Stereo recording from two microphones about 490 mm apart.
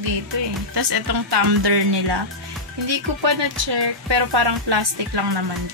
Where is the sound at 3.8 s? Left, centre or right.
Right.